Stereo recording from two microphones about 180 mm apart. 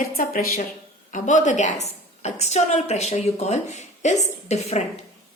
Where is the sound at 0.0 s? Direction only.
55° left (ahead or behind); by 5.0 s 35° left (ahead or behind).